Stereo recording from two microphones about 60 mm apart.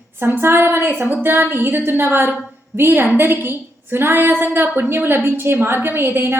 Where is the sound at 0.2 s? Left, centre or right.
Right.